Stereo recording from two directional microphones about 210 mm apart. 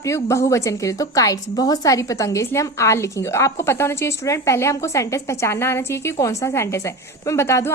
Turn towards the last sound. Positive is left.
turn(degrees=15)  # may be behind; listen again after turning